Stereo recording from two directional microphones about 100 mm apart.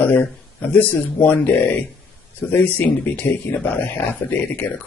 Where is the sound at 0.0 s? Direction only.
15° left (ahead or behind).